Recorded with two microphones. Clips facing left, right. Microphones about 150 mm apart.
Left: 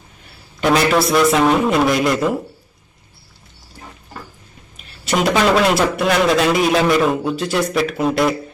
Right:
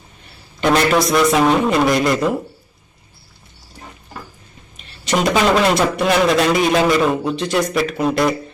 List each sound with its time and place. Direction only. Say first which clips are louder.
0.6 s a man's voice: even; centre (ahead or behind)
4.8 s a man's voice: even; 5° left (ahead or behind)